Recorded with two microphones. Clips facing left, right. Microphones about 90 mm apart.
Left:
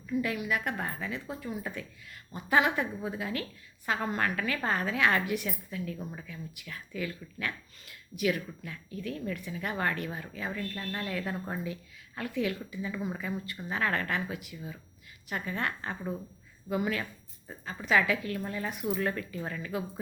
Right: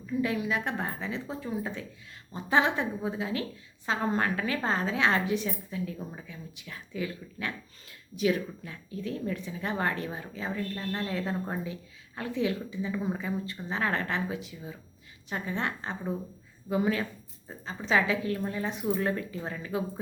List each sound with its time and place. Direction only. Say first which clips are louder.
0.2 s speech: right 3 dB; 25° right (ahead or behind)